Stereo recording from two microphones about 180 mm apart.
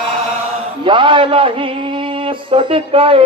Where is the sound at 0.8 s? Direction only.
25° right (ahead or behind).